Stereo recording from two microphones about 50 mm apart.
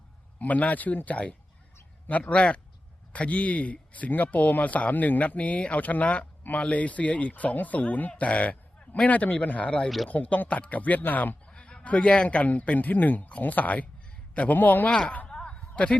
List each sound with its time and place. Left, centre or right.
0.3 s a man's voice: left
8.2 s a sound: left
9.0 s speech: left
10.1 s speech: left
11.4 s speech: centre; by 14.8 s left
14.8 s speech: centre
15.3 s a sound: centre